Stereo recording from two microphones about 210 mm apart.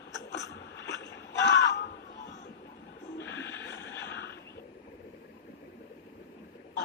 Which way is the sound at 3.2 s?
60° left (ahead or behind).